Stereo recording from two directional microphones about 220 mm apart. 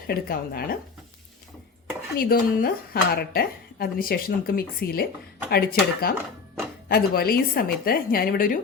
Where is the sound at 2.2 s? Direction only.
40° left (ahead or behind).